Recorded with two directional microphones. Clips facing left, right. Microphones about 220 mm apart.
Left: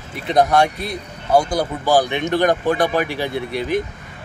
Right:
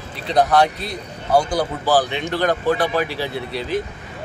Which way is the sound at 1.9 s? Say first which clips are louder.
Left 3 dB; 15° left (ahead or behind).